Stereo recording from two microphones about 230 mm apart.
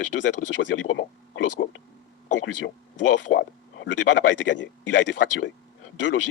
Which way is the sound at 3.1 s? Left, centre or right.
Left.